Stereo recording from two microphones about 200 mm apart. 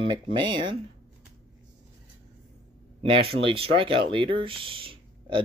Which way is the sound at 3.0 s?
25° right (ahead or behind).